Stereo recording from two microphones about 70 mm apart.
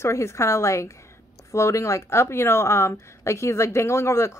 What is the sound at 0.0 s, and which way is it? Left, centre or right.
A woman's voice, left.